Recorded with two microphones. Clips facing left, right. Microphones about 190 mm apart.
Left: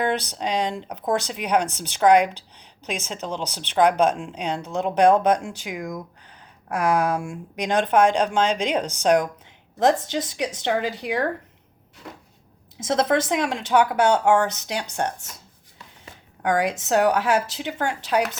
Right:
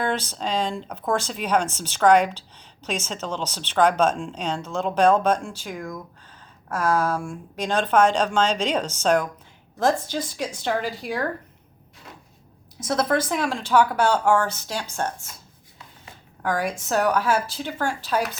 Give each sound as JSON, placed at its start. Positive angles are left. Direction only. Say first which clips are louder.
{"t": 0.0, "sound": "speech", "louder": "left 2 dB", "side_deg": 15}
{"t": 12.8, "sound": "speech", "louder": "left 2 dB", "side_deg": 20}
{"t": 16.4, "sound": "speech", "louder": "left 3 dB", "side_deg": 20}